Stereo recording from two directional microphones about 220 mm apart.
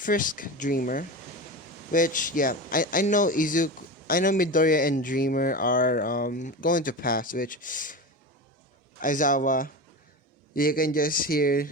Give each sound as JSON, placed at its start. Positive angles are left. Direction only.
{"t": 0.0, "sound": "speech", "side_deg": 35}
{"t": 9.0, "sound": "speech", "side_deg": 35}